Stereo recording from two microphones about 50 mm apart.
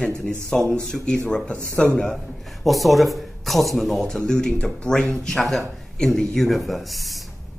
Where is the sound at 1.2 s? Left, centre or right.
Left.